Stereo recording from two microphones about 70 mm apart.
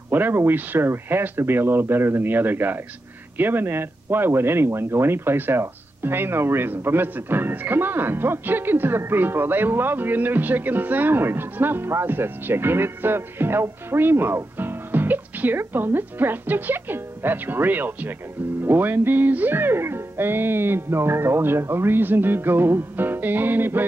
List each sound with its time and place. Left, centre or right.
0.1 s speech: right